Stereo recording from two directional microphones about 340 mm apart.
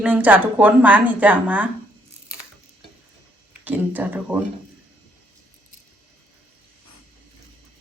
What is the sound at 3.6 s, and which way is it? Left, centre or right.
Speech, centre.